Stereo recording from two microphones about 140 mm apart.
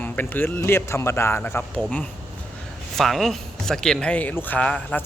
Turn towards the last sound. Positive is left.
turn(degrees=10)  # may be behind; listen again after turning